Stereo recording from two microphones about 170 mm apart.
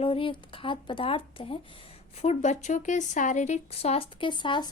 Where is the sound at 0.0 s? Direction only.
30° left (ahead or behind).